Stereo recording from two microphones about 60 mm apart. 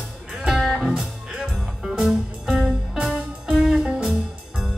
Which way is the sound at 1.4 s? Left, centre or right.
Centre.